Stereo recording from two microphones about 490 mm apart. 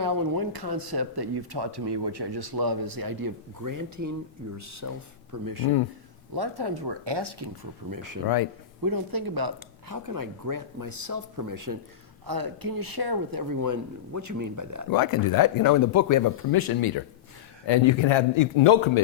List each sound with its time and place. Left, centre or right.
0.0 s speech: right
6.3 s speech: right
14.8 s speech: left
17.7 s a man's voice: left